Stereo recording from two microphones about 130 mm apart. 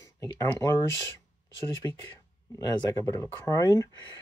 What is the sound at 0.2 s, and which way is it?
Speech, 25° left (ahead or behind).